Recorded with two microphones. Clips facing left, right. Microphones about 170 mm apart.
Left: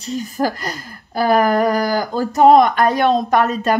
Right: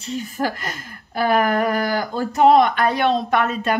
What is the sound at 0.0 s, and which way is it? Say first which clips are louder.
Speech: left 4 dB; 40° left (ahead or behind).